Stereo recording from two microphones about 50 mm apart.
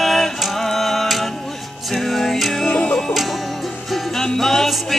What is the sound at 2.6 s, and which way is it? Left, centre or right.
Music, left.